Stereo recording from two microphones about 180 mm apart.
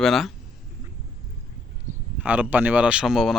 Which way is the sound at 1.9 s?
45° right (ahead or behind).